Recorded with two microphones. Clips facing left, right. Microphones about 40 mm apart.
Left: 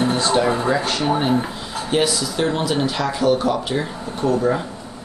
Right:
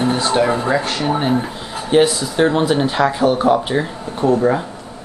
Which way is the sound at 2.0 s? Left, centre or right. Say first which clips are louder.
Right 5 dB; right.